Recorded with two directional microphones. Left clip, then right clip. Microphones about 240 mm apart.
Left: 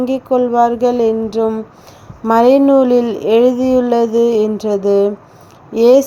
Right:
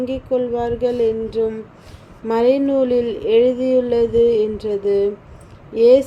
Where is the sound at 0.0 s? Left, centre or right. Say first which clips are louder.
Left 6 dB; left.